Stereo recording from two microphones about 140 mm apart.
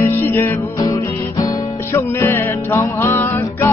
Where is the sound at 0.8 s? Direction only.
25° left (ahead or behind).